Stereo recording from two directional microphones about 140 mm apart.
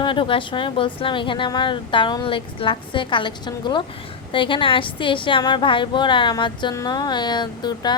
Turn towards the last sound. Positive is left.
turn(degrees=30)  # may be behind; listen again after turning